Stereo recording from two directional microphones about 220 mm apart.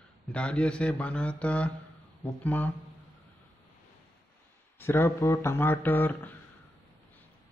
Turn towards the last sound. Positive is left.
turn(degrees=10)  # may be behind; listen again after turning